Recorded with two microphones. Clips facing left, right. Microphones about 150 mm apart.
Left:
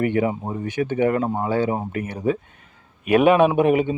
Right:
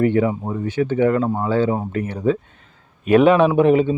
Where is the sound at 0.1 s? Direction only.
20° left (ahead or behind).